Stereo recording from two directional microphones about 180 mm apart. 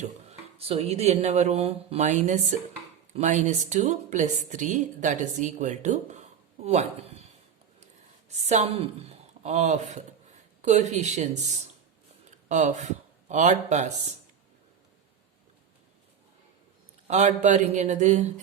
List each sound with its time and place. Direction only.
0.0 s a woman's voice: 35° right (ahead or behind)
17.1 s a woman's voice: 40° right (ahead or behind)